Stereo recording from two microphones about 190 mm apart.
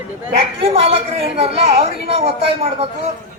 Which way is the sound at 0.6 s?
30° right (ahead or behind).